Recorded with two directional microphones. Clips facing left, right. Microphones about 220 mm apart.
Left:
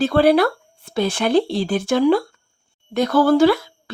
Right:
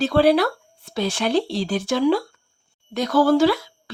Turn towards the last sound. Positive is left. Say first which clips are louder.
# left 3 dB
turn(degrees=55)  # may be behind; listen again after turning